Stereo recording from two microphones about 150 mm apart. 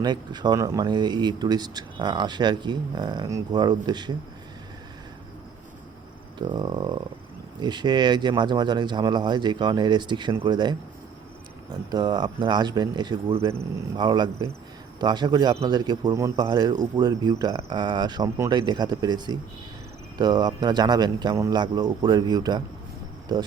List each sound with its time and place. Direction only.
0.0 s speech: 30° right (ahead or behind)
6.5 s speech: 30° right (ahead or behind)
11.9 s speech: 30° right (ahead or behind)